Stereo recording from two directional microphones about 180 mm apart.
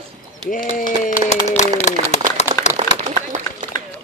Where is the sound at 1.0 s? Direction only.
40° left (ahead or behind).